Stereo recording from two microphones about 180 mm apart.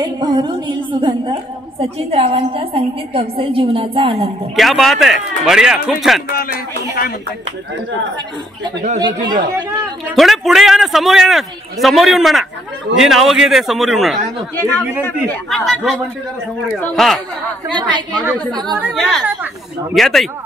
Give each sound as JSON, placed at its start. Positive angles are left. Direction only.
{"t": 0.0, "sound": "a woman's voice", "side_deg": -25}
{"t": 4.6, "sound": "a man's voice", "side_deg": 0}
{"t": 8.9, "sound": "a woman's voice", "side_deg": -25}
{"t": 10.1, "sound": "a man's voice", "side_deg": 0}
{"t": 14.6, "sound": "speech", "side_deg": 10}
{"t": 15.5, "sound": "a man's voice", "side_deg": 0}
{"t": 17.6, "sound": "a woman's voice", "side_deg": -25}
{"t": 18.9, "sound": "a man's voice", "side_deg": 0}